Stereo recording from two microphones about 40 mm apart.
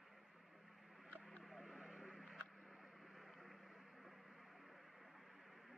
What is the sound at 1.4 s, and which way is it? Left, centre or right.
Vehicle, centre.